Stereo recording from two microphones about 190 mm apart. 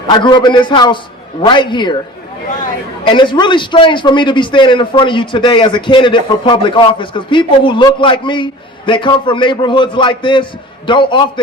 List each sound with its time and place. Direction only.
0.1 s a man's voice: 25° left (ahead or behind)
3.1 s a man's voice: 25° left (ahead or behind)